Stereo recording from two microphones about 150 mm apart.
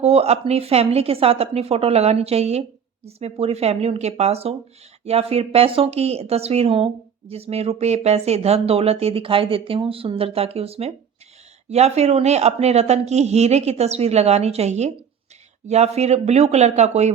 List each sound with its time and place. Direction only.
0.0 s a woman's voice: 45° right (ahead or behind)